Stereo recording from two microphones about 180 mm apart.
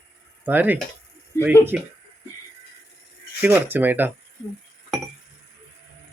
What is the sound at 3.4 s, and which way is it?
Speech, 10° right (ahead or behind).